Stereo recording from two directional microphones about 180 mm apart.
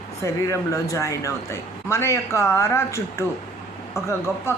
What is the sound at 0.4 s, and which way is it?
A man's voice, 15° left (ahead or behind).